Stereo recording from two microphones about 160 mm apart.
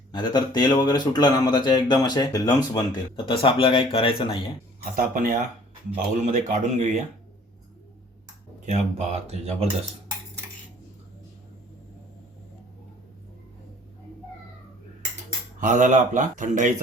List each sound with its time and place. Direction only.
0.1 s speech: 25° left (ahead or behind)
4.8 s a man's voice: 60° right (ahead or behind); by 7.0 s 45° right (ahead or behind)
8.6 s a man's voice: 45° right (ahead or behind)
15.6 s a man's voice: 50° right (ahead or behind)